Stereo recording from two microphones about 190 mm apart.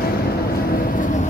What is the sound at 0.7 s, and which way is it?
Vehicle, 45° left (ahead or behind).